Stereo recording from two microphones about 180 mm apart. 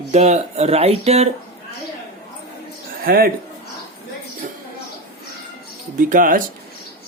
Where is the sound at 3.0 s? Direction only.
55° right (ahead or behind).